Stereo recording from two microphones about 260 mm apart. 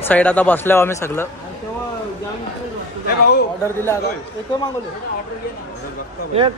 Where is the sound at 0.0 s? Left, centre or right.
Centre.